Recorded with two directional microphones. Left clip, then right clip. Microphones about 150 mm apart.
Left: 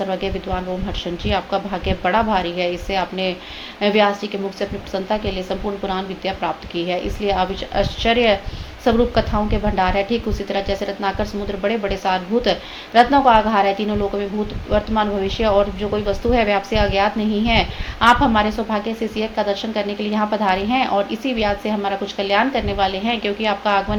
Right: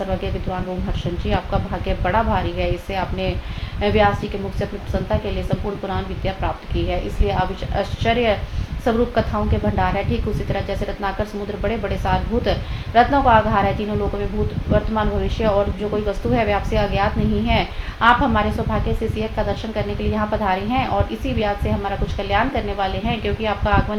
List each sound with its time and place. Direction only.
1.2 s a woman's voice: 40° left (ahead or behind)
14.7 s a woman's voice: 40° left (ahead or behind)